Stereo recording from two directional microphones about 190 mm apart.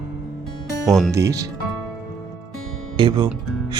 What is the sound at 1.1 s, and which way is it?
Speech, 15° right (ahead or behind).